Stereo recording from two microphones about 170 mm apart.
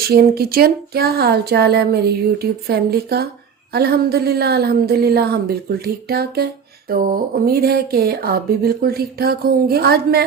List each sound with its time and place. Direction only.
0.0 s speech: 65° right (ahead or behind)